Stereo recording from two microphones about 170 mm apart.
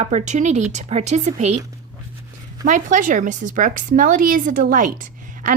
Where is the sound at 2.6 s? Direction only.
45° right (ahead or behind).